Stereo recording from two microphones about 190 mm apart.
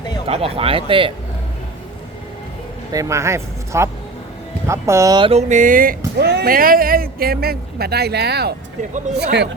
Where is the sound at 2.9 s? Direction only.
15° right (ahead or behind).